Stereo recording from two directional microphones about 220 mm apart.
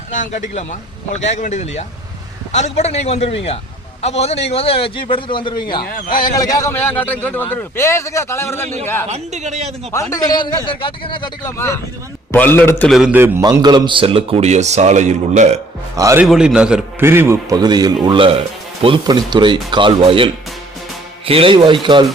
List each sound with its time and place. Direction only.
0.1 s a man's voice: 35° left (ahead or behind); by 8.6 s 10° left (ahead or behind)
9.0 s a man's voice: 30° right (ahead or behind)
9.9 s a man's voice: 15° left (ahead or behind); by 15.4 s 30° right (ahead or behind)
16.0 s a man's voice: 15° right (ahead or behind)
16.2 s a man's voice: centre (ahead or behind); by 22.0 s 20° right (ahead or behind)